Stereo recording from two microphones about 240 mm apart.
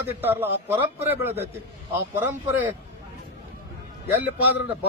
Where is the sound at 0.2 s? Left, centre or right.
Centre.